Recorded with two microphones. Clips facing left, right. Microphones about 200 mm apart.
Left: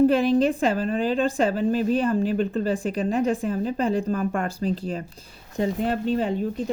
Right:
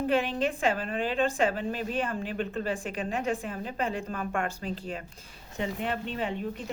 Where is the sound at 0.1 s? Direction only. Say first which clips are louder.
Left 8 dB; 40° left (ahead or behind).